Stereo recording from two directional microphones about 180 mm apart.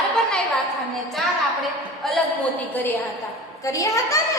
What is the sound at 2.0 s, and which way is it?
Speech, centre (ahead or behind).